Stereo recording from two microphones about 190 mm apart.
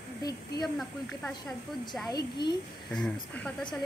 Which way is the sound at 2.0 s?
20° left (ahead or behind).